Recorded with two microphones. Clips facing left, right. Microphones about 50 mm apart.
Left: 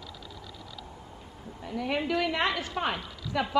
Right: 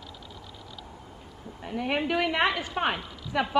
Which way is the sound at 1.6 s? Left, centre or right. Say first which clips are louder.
Right 2 dB; right.